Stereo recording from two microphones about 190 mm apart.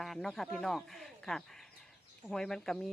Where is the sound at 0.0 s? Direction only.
Centre (ahead or behind).